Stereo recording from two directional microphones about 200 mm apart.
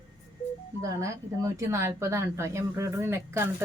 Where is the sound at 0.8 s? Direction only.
15° right (ahead or behind).